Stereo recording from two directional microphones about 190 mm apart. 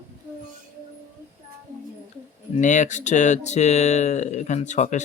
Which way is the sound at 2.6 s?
40° left (ahead or behind).